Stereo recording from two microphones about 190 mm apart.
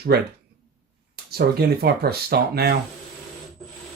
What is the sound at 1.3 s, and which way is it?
Speech, 55° right (ahead or behind).